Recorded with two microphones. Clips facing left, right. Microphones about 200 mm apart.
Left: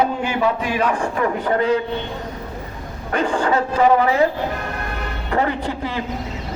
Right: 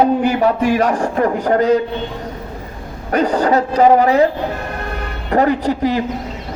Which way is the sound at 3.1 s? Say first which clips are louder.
Right 5 dB; 40° right (ahead or behind).